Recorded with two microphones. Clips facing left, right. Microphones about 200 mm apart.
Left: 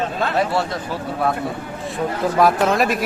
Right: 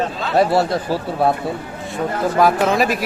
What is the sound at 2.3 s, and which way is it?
Speech, centre (ahead or behind).